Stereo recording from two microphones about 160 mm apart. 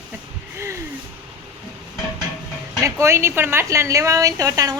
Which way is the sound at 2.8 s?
15° right (ahead or behind).